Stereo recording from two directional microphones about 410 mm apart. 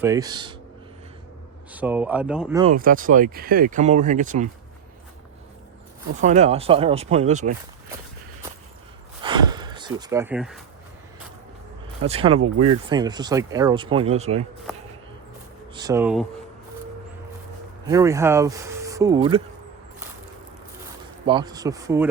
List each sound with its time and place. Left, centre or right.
0.0 s speech: centre
1.7 s speech: centre
2.7 s speech: centre
6.1 s speech: centre
9.2 s gasp: centre
12.0 s speech: centre
15.7 s speech: centre
17.8 s speech: centre
21.2 s speech: centre